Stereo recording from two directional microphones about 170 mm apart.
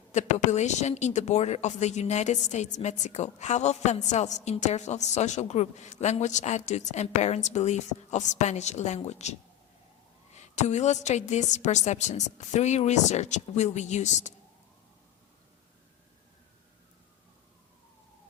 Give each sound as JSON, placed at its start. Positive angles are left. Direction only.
{"t": 0.1, "sound": "a woman's voice", "side_deg": 45}
{"t": 10.5, "sound": "a woman's voice", "side_deg": 40}